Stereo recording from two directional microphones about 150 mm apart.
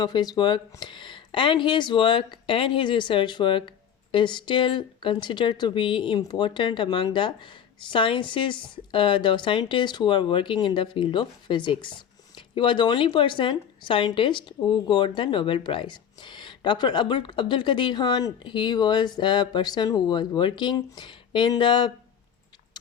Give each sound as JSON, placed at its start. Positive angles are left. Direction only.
{"t": 0.0, "sound": "speech", "side_deg": 25}